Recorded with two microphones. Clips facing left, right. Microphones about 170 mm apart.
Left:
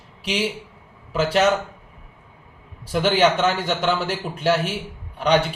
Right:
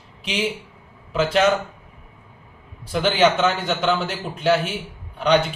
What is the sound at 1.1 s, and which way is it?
Speech, 5° left (ahead or behind).